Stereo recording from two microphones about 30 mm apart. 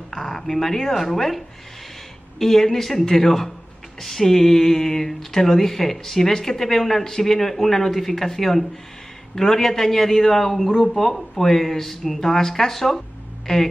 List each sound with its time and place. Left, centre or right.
0.1 s speech: centre
10.7 s speech: left
11.0 s speech: centre
13.5 s speech: centre